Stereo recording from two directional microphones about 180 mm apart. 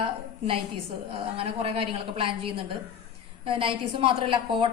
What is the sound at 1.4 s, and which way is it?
A woman's voice, 30° right (ahead or behind).